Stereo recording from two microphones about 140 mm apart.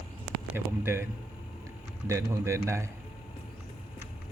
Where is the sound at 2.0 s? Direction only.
20° right (ahead or behind).